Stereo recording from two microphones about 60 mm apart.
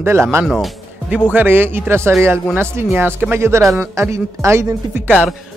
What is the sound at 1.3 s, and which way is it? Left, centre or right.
Speech, right.